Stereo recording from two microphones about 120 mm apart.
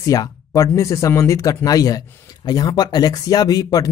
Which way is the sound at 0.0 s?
30° left (ahead or behind).